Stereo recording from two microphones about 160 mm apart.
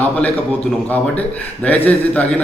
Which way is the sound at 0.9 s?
10° left (ahead or behind).